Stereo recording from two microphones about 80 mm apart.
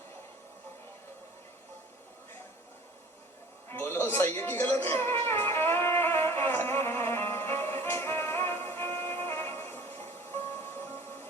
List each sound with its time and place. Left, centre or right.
3.7 s music: left